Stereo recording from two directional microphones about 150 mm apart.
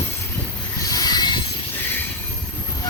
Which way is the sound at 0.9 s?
25° left (ahead or behind).